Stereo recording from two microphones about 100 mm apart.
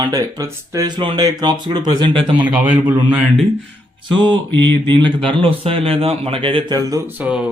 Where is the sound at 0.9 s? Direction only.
60° right (ahead or behind).